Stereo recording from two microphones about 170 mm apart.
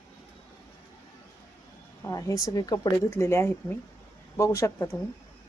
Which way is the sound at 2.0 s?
20° left (ahead or behind).